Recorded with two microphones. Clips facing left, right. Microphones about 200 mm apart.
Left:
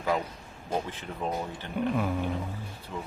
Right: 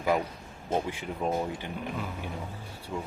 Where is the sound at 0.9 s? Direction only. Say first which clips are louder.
Right 3 dB; 10° right (ahead or behind).